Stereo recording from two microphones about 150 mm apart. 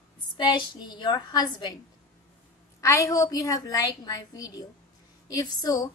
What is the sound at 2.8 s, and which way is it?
Speech, 20° left (ahead or behind).